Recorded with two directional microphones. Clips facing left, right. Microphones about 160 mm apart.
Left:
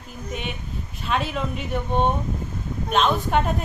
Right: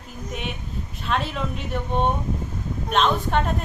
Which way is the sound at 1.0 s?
Centre (ahead or behind).